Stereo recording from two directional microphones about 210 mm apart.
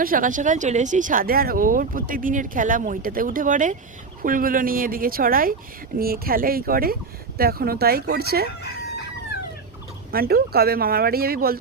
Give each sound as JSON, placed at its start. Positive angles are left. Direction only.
{"t": 0.0, "sound": "speech", "side_deg": -40}
{"t": 10.1, "sound": "speech", "side_deg": -45}